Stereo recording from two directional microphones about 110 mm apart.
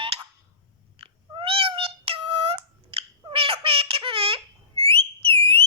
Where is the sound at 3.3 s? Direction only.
55° right (ahead or behind).